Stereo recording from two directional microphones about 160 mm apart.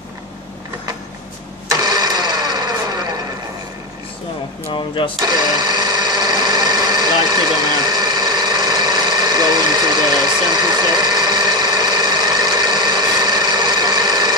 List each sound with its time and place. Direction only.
1.9 s a sound: 25° right (ahead or behind)
4.7 s speech: 30° left (ahead or behind)
5.2 s sewing machine: 25° right (ahead or behind)